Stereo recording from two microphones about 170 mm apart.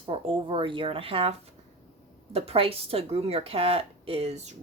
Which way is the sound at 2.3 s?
35° right (ahead or behind).